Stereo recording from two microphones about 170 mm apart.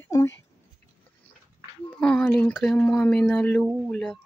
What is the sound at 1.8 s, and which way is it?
Speech, 5° left (ahead or behind).